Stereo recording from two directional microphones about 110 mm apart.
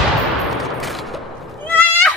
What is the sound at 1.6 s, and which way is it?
Goat, 15° left (ahead or behind).